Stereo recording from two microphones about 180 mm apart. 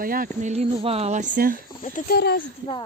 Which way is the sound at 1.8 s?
50° left (ahead or behind).